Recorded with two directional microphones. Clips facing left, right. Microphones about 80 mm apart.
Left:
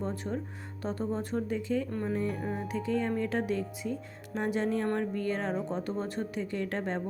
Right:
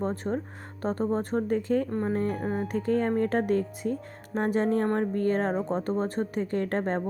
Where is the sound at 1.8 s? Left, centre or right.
Right.